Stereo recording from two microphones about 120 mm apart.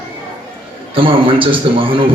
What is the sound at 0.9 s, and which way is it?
A man's voice, 45° right (ahead or behind).